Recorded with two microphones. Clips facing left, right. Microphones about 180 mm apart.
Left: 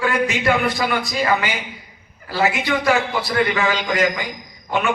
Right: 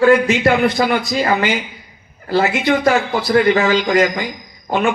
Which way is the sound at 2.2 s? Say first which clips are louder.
Right 5 dB; 45° right (ahead or behind).